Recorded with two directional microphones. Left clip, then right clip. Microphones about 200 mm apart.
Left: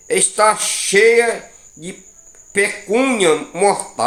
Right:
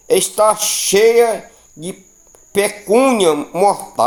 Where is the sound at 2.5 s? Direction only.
45° right (ahead or behind).